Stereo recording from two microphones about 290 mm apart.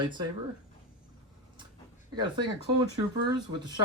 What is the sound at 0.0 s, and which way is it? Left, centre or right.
Speech, centre.